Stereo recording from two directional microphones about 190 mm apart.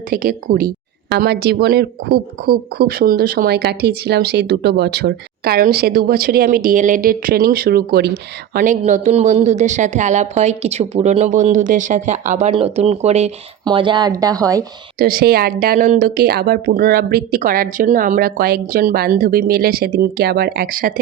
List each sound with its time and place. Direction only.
0.1 s speech: 50° right (ahead or behind)
8.5 s a woman's voice: 40° right (ahead or behind); by 14.6 s 20° right (ahead or behind)
14.9 s speech: 50° right (ahead or behind)